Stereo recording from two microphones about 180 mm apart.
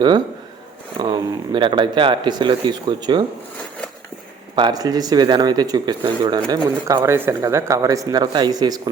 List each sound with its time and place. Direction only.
0.9 s speech: 25° right (ahead or behind)
4.5 s speech: 25° right (ahead or behind)